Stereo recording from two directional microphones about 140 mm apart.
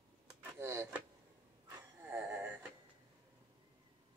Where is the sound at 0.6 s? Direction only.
20° right (ahead or behind).